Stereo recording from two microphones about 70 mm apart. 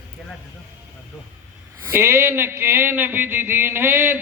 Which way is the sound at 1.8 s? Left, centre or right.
Right.